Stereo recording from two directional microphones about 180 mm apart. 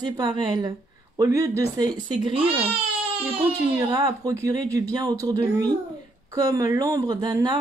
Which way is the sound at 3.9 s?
20° right (ahead or behind).